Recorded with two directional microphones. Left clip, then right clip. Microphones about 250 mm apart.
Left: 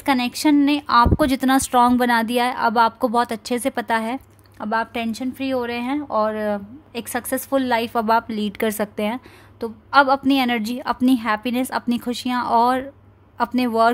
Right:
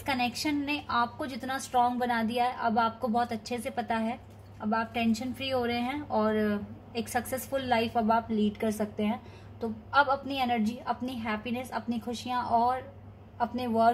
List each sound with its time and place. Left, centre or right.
0.0 s a woman's voice: left